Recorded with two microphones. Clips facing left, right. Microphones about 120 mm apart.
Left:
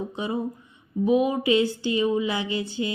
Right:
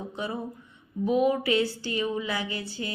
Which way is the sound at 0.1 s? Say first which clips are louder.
Left 3 dB; 20° left (ahead or behind).